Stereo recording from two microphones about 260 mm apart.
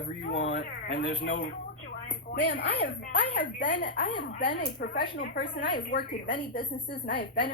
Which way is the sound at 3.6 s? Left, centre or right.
Left.